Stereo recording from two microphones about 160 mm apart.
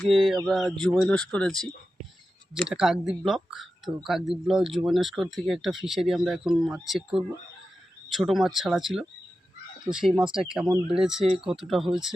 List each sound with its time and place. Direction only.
0.0 s speech: centre (ahead or behind)